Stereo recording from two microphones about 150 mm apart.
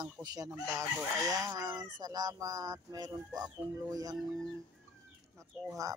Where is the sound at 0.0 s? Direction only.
25° right (ahead or behind).